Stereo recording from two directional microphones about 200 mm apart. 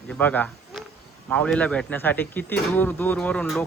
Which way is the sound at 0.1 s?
10° left (ahead or behind).